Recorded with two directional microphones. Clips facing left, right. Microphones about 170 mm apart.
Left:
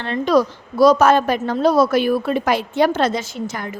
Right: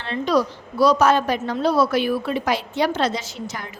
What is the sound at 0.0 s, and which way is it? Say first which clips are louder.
A woman's voice: left 4 dB; 50° left (ahead or behind).